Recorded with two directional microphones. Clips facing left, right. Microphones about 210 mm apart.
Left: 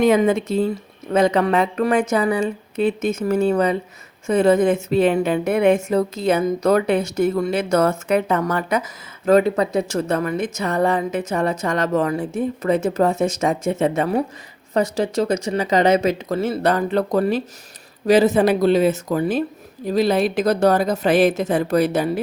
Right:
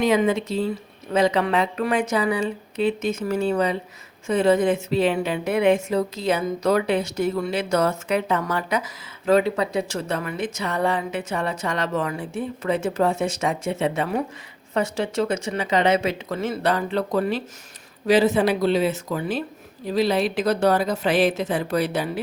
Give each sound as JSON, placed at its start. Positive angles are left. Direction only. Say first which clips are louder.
{"t": 0.0, "sound": "a woman's voice", "louder": "left 4 dB", "side_deg": 50}